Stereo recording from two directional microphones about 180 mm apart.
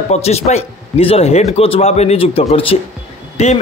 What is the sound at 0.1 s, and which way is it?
Speech, 35° left (ahead or behind).